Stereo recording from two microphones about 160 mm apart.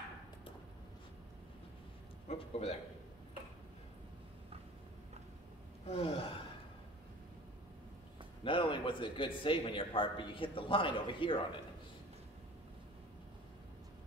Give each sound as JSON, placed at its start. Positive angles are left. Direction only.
{"t": 2.2, "sound": "a man's voice", "side_deg": 40}
{"t": 5.9, "sound": "a man's voice", "side_deg": 40}
{"t": 8.5, "sound": "a man's voice", "side_deg": 30}